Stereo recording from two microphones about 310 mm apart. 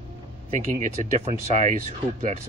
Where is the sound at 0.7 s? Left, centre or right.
Right.